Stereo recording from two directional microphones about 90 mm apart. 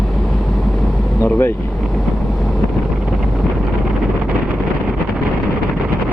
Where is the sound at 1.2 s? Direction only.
30° left (ahead or behind).